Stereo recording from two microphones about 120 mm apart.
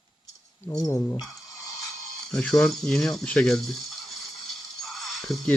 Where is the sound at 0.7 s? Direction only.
30° left (ahead or behind).